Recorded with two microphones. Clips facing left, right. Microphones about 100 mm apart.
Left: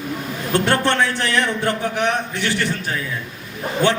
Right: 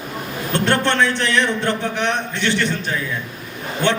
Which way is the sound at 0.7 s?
15° left (ahead or behind).